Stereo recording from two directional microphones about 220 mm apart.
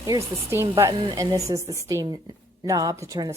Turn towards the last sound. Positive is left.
turn(degrees=-15)  # may be behind; listen again after turning